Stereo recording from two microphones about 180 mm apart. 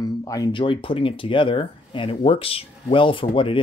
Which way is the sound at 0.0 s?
20° left (ahead or behind).